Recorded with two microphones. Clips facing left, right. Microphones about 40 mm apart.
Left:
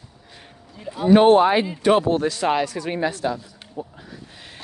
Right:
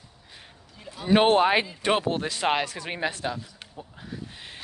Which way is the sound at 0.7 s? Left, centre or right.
Centre.